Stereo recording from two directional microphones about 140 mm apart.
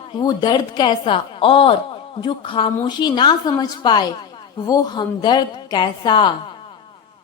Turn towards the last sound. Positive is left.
turn(degrees=35)  # may be behind; listen again after turning